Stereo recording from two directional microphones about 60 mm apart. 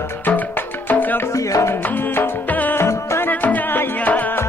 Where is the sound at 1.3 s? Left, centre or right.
Left.